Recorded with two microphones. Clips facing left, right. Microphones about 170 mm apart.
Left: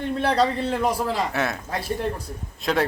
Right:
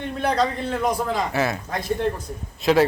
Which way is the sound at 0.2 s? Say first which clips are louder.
Even; 30° left (ahead or behind).